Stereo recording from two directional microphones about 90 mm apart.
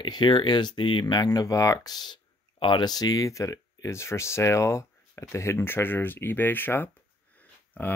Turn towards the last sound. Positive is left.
turn(degrees=20)  # may be behind; listen again after turning